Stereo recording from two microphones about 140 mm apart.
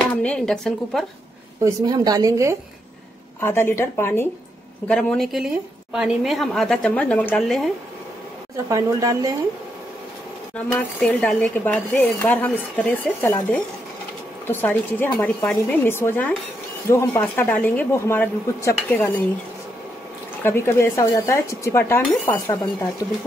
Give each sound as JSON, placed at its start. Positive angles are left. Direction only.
{"t": 0.1, "sound": "a woman's voice", "side_deg": 5}
{"t": 1.6, "sound": "speech", "side_deg": -30}
{"t": 3.3, "sound": "a woman's voice", "side_deg": 15}
{"t": 4.8, "sound": "a woman's voice", "side_deg": 5}
{"t": 7.4, "sound": "a woman's voice", "side_deg": 0}
{"t": 8.6, "sound": "speech", "side_deg": -25}
{"t": 10.7, "sound": "a woman's voice", "side_deg": 10}
{"t": 20.4, "sound": "speech", "side_deg": 15}